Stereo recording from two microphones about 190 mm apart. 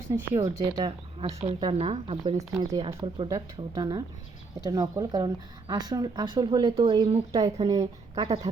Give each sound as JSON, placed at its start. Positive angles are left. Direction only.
{"t": 0.8, "sound": "speech", "side_deg": -30}
{"t": 2.5, "sound": "speech", "side_deg": -15}